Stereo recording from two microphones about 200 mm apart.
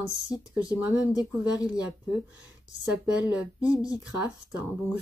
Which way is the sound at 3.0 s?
5° right (ahead or behind).